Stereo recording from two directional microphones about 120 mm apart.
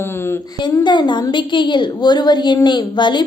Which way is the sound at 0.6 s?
40° left (ahead or behind).